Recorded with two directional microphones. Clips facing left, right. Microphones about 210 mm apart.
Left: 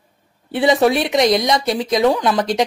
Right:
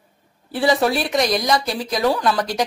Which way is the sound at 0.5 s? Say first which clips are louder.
Left 4 dB; 20° left (ahead or behind).